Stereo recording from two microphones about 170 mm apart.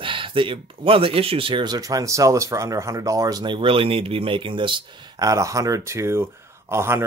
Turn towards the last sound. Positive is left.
turn(degrees=-15)  # may be behind; listen again after turning